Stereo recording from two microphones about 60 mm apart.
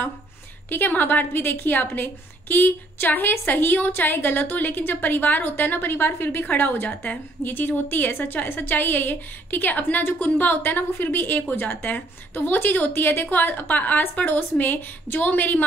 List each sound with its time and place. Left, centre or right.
0.7 s a woman's voice: left